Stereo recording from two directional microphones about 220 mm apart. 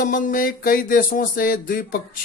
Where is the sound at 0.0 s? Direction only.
35° left (ahead or behind).